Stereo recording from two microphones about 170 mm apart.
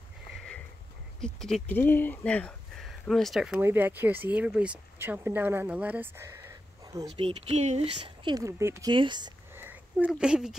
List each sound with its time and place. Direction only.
1.2 s speech: 5° left (ahead or behind); by 7.1 s 20° right (ahead or behind)
7.2 s speech: 35° right (ahead or behind); by 8.9 s 15° right (ahead or behind)
8.9 s speech: 25° right (ahead or behind)
9.5 s a sound: 10° right (ahead or behind)
10.1 s speech: 5° right (ahead or behind)